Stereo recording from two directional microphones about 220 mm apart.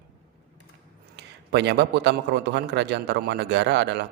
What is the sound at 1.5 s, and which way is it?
A man's voice, 50° right (ahead or behind).